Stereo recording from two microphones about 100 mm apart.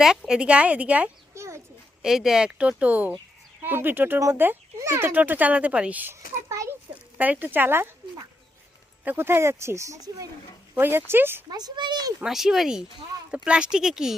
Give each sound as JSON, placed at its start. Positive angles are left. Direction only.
{"t": 0.0, "sound": "a child's voice", "side_deg": -5}
{"t": 1.3, "sound": "a sound", "side_deg": -30}
{"t": 2.0, "sound": "a child's voice", "side_deg": -5}
{"t": 6.5, "sound": "a sound", "side_deg": -30}
{"t": 7.2, "sound": "speech", "side_deg": -15}
{"t": 9.0, "sound": "speech", "side_deg": -25}
{"t": 10.8, "sound": "speech", "side_deg": -20}
{"t": 11.5, "sound": "a child's voice", "side_deg": -45}
{"t": 12.2, "sound": "a child's voice", "side_deg": -5}